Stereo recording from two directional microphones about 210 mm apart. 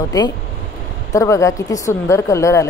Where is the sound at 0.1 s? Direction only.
20° left (ahead or behind).